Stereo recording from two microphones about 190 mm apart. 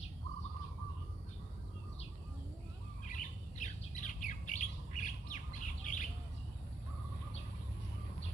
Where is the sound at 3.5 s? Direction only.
40° left (ahead or behind).